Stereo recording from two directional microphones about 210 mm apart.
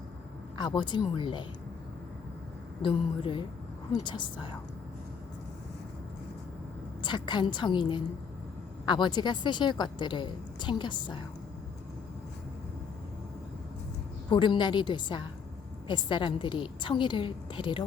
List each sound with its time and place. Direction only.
0.5 s a woman's voice: 20° left (ahead or behind)
2.8 s a woman's voice: 25° left (ahead or behind)
7.0 s a woman's voice: 20° left (ahead or behind)
14.3 s a woman's voice: 25° left (ahead or behind)